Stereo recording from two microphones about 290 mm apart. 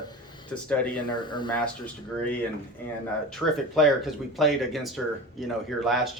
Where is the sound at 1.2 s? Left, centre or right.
Centre.